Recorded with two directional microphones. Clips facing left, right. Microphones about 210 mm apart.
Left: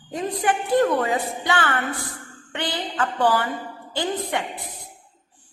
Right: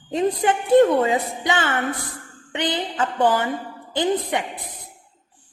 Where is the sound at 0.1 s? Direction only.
25° right (ahead or behind).